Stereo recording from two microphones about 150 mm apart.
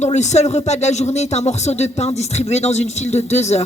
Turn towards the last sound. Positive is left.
turn(degrees=50)  # may be behind; listen again after turning